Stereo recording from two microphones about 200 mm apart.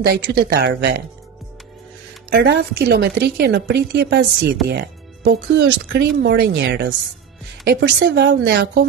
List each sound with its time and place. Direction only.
0.0 s a woman's voice: 55° right (ahead or behind)
2.3 s a woman's voice: 55° right (ahead or behind)